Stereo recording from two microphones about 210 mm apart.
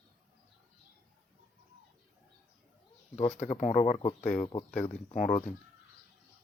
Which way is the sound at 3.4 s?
30° left (ahead or behind).